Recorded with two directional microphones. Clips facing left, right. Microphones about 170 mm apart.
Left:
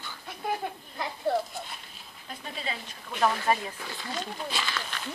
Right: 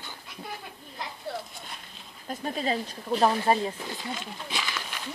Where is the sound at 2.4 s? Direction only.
40° right (ahead or behind); by 5.0 s 10° right (ahead or behind).